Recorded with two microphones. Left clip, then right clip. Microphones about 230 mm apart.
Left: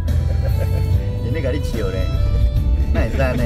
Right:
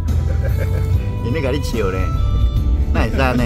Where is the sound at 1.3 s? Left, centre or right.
Right.